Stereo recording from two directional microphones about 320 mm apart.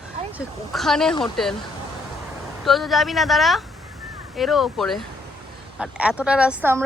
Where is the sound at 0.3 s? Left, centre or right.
Centre.